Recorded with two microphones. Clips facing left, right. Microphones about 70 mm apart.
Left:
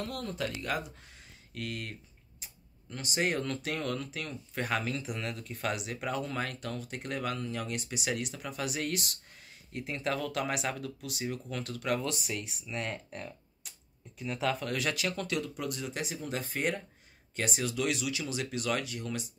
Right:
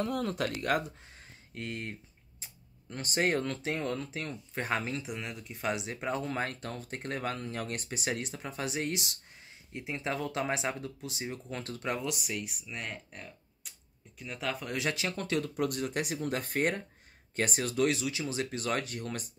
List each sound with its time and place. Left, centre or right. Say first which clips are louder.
0.4 s speech: right 1 dB; right
1.5 s speech: even; right
12.0 s speech: even; centre
14.7 s speech: left 1 dB; right